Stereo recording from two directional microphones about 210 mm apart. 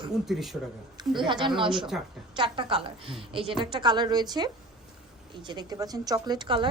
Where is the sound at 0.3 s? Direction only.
Centre (ahead or behind).